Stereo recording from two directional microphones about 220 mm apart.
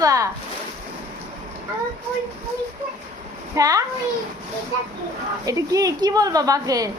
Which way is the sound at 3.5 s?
15° right (ahead or behind).